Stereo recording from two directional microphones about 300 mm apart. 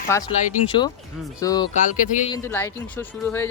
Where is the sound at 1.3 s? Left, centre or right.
Centre.